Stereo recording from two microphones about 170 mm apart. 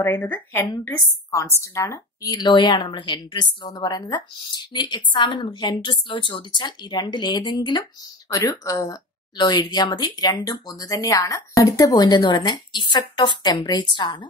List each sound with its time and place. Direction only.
0.0 s a woman's voice: 10° left (ahead or behind)